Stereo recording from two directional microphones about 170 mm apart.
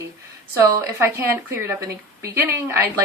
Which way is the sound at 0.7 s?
15° right (ahead or behind).